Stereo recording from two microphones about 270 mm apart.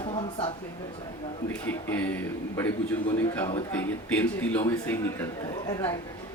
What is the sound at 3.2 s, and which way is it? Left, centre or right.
Speech, centre.